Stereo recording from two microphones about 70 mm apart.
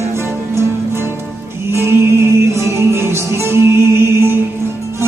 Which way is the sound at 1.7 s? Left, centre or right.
Right.